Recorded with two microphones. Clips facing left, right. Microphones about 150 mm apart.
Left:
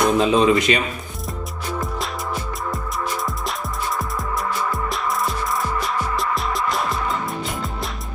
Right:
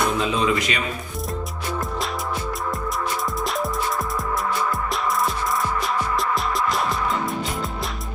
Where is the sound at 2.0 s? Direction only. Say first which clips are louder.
Even; centre (ahead or behind).